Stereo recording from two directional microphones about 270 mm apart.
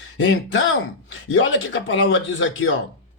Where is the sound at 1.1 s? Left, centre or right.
Left.